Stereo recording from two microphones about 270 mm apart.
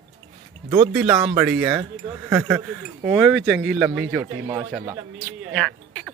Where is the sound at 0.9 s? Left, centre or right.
Centre.